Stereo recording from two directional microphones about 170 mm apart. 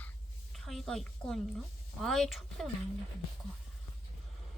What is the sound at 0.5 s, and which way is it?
A woman's voice, centre (ahead or behind).